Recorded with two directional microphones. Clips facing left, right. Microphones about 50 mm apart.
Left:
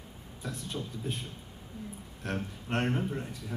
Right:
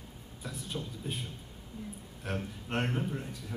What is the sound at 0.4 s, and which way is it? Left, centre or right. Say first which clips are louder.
Speech: left 2 dB; centre.